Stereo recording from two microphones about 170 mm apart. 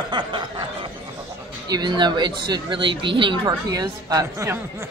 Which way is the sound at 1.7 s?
25° right (ahead or behind).